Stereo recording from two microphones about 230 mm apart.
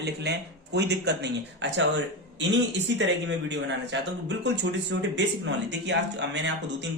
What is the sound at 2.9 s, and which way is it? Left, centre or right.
Speech, right.